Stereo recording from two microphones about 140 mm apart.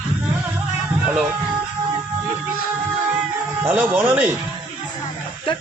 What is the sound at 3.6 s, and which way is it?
Speech, 15° right (ahead or behind).